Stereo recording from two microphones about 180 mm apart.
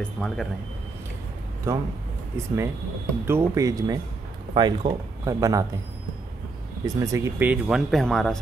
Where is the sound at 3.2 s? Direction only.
15° right (ahead or behind).